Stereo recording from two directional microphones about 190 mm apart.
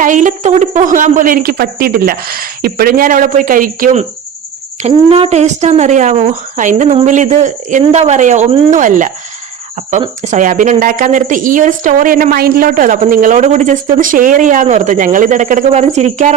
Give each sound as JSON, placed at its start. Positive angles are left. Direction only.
{"t": 0.0, "sound": "a woman's voice", "side_deg": -40}
{"t": 4.8, "sound": "speech", "side_deg": -30}
{"t": 10.2, "sound": "a woman's voice", "side_deg": -40}